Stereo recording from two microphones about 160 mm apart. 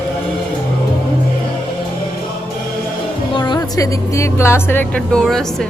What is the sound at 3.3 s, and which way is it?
Speech, 25° left (ahead or behind).